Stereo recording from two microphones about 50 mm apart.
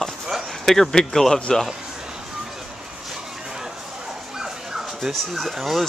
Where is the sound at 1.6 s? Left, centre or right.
Centre.